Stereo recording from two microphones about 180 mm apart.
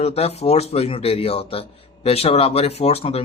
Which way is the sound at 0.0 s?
35° left (ahead or behind).